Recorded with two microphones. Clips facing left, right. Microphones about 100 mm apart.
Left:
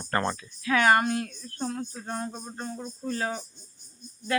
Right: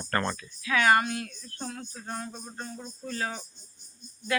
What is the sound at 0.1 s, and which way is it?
Speech, 20° left (ahead or behind).